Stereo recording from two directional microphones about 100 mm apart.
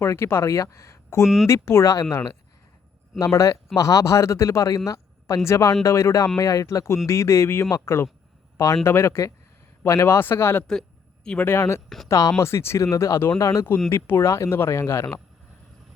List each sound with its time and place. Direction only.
0.0 s speech: 25° left (ahead or behind)
1.2 s speech: 5° right (ahead or behind)
1.5 s speech: 30° left (ahead or behind)
10.7 s a sound: 5° left (ahead or behind)
11.4 s speech: 25° left (ahead or behind)